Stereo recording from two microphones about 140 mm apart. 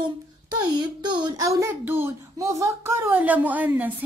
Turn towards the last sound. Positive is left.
turn(degrees=-10)  # may be behind; listen again after turning